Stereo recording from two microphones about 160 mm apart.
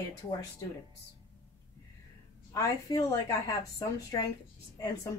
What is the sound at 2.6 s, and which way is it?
A woman's voice, 20° left (ahead or behind).